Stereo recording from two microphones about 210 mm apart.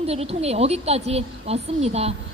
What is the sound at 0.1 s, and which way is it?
A woman's voice, 30° right (ahead or behind).